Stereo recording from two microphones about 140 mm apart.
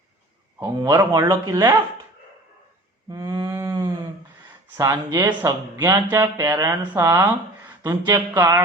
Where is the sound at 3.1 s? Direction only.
25° right (ahead or behind).